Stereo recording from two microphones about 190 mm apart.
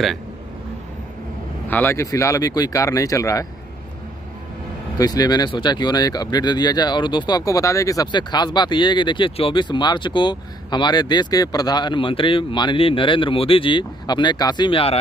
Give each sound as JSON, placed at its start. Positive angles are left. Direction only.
{"t": 1.7, "sound": "speech", "side_deg": 10}
{"t": 4.9, "sound": "speech", "side_deg": 20}